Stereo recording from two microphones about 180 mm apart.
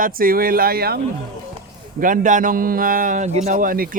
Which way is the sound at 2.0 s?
45° right (ahead or behind).